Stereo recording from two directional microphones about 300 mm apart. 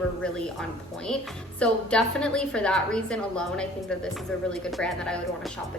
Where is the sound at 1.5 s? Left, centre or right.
Centre.